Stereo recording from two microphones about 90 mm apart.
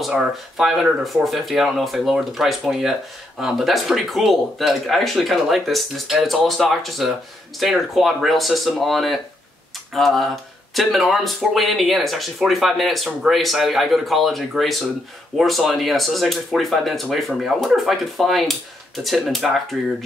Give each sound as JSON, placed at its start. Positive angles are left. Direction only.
{"t": 0.0, "sound": "speech", "side_deg": -5}